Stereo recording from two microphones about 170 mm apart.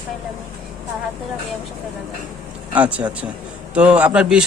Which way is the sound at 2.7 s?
5° right (ahead or behind).